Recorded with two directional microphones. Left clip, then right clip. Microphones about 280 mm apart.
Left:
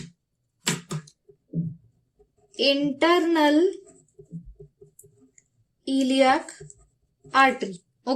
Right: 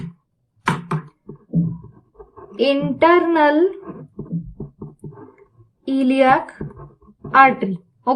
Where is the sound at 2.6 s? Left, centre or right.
Left.